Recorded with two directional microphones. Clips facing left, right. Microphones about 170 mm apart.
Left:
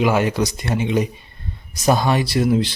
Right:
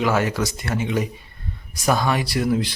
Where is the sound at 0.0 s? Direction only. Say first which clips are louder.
Left 3 dB; 20° left (ahead or behind).